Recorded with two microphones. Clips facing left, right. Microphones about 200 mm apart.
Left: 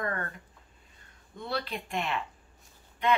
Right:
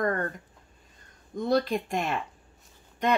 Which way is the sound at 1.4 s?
45° right (ahead or behind).